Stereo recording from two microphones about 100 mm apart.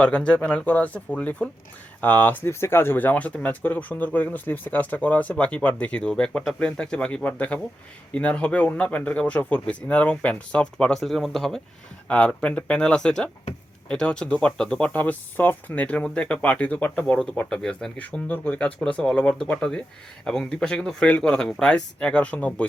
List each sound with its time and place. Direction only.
0.0 s speech: 10° left (ahead or behind)